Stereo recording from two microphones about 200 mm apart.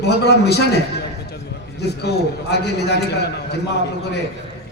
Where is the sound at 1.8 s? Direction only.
55° left (ahead or behind).